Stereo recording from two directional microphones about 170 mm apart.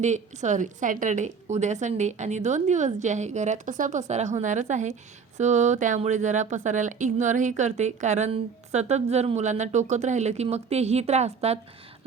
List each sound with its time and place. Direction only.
0.0 s a woman's voice: 45° right (ahead or behind)